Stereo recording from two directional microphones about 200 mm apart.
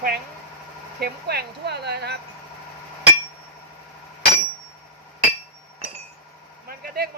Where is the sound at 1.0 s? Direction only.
55° right (ahead or behind).